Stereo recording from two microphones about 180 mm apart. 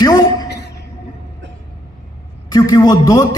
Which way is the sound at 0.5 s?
70° left (ahead or behind).